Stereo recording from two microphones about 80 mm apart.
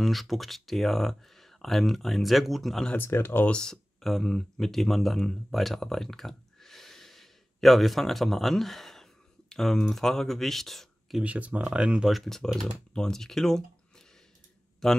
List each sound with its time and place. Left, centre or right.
0.0 s speech: centre
3.0 s speech: left
3.4 s speech: centre
11.2 s speech: centre
12.1 s speech: centre